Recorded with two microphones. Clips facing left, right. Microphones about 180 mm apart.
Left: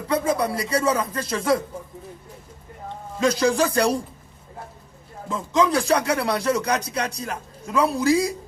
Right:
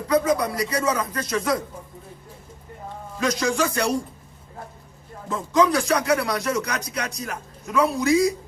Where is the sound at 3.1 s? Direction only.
30° left (ahead or behind).